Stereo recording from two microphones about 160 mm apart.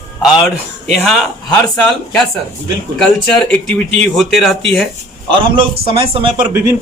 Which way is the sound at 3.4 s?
5° left (ahead or behind).